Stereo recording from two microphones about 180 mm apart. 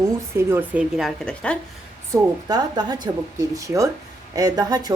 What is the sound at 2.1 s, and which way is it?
Speech, 20° right (ahead or behind).